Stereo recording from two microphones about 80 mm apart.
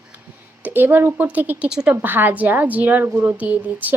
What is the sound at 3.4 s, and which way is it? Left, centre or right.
Speech, right.